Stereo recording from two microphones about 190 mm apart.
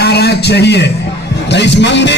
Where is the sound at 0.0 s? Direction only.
60° left (ahead or behind).